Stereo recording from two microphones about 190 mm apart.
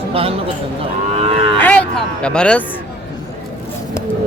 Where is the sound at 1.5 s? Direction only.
10° left (ahead or behind).